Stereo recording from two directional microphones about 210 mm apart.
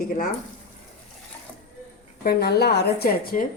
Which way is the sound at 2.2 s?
50° left (ahead or behind).